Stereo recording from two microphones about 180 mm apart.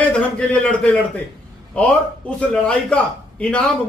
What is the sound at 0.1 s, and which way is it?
A man's voice, 5° left (ahead or behind).